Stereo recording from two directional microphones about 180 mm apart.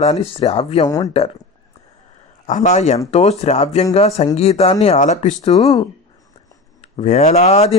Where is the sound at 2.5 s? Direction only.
40° left (ahead or behind).